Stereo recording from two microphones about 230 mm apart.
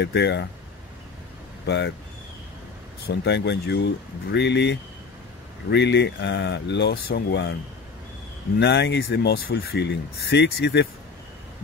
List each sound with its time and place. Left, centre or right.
0.0 s speech: left
1.7 s speech: left
3.1 s speech: left
8.5 s speech: left